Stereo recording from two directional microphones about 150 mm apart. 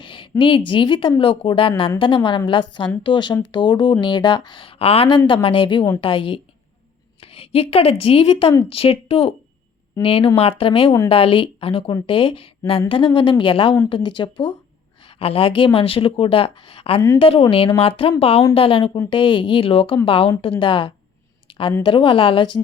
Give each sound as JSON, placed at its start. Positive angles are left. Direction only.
{"t": 0.0, "sound": "a woman's voice", "side_deg": 35}
{"t": 21.4, "sound": "a sound", "side_deg": 35}
{"t": 21.8, "sound": "speech", "side_deg": 35}